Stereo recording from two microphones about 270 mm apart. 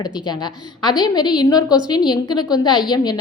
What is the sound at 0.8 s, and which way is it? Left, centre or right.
Speech, centre.